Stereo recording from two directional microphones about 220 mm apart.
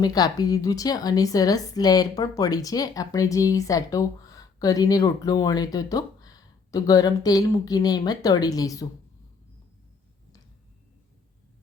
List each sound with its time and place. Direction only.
0.0 s a woman's voice: 15° left (ahead or behind)